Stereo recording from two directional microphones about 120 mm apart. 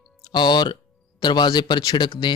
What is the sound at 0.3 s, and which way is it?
Speech, 40° left (ahead or behind).